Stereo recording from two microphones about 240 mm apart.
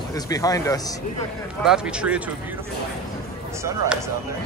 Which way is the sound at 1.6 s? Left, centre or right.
Centre.